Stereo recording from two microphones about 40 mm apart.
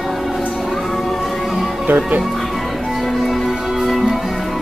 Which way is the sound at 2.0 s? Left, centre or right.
Right.